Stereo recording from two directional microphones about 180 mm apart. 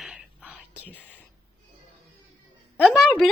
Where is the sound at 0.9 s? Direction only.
10° left (ahead or behind).